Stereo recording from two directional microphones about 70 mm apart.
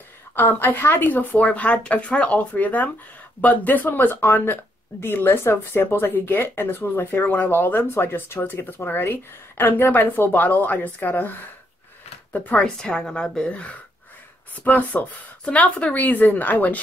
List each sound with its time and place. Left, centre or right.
0.4 s speech: left